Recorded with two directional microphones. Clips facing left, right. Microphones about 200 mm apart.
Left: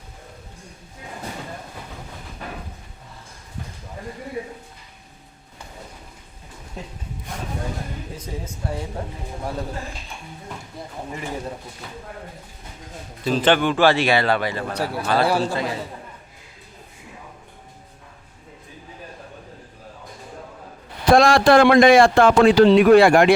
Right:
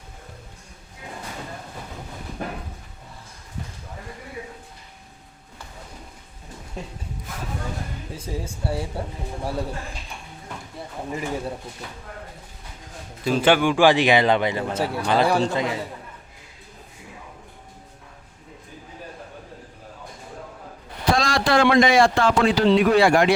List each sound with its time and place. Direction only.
8.4 s a man's voice: 10° right (ahead or behind)
13.2 s a man's voice: 10° right (ahead or behind)
21.1 s a man's voice: 55° left (ahead or behind)